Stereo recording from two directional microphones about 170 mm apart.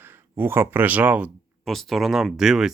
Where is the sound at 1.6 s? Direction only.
Centre (ahead or behind).